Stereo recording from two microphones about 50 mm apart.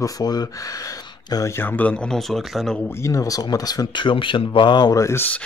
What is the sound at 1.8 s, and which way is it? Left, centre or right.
Speech, left.